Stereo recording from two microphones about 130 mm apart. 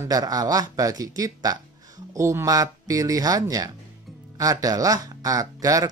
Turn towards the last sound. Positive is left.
turn(degrees=-25)  # may be behind; listen again after turning